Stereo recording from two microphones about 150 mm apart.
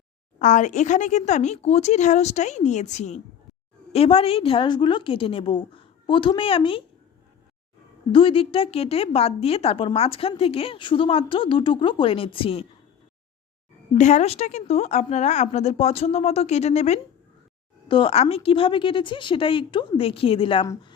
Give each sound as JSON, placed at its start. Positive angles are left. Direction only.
{"t": 0.3, "sound": "a woman's voice", "side_deg": 55}
{"t": 3.9, "sound": "a woman's voice", "side_deg": 40}
{"t": 8.1, "sound": "a woman's voice", "side_deg": 35}
{"t": 14.0, "sound": "a woman's voice", "side_deg": 50}
{"t": 17.8, "sound": "a woman's voice", "side_deg": 35}